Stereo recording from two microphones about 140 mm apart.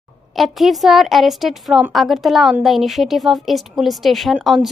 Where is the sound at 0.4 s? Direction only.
Centre (ahead or behind).